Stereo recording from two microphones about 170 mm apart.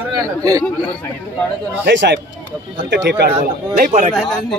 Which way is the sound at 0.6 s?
10° left (ahead or behind).